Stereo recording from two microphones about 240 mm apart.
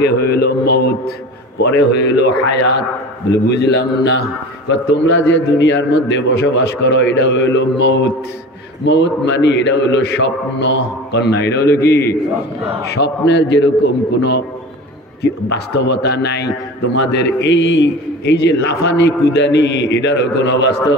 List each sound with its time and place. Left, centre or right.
0.0 s a man's voice: left
3.4 s a man's voice: left